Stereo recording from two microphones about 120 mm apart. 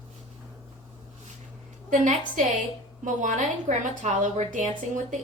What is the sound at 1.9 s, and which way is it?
A woman's voice, 90° right.